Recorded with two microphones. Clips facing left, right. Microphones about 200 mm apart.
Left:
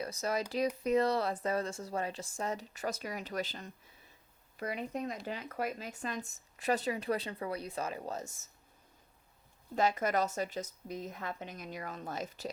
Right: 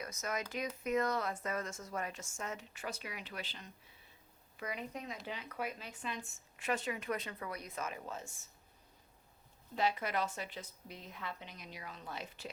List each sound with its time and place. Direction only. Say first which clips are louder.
0.0 s speech: left 6 dB; 35° left (ahead or behind)
9.7 s speech: left 5 dB; 45° left (ahead or behind)